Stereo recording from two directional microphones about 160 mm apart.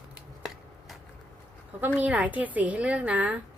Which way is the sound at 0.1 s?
Centre (ahead or behind).